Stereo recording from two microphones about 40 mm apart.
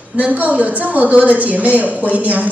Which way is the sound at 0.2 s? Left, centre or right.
Right.